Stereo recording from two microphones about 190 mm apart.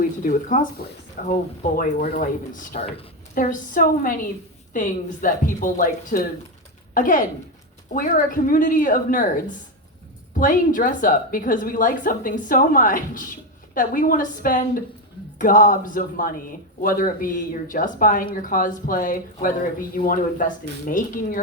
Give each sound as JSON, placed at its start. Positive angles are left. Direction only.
{"t": 0.0, "sound": "speech", "side_deg": 45}